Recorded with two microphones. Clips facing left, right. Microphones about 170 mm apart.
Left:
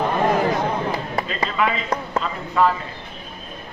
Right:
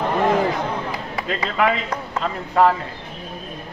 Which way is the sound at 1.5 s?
60° right (ahead or behind).